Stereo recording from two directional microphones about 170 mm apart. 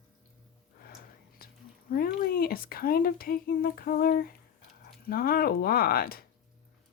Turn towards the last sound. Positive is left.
turn(degrees=60)  # may be behind; listen again after turning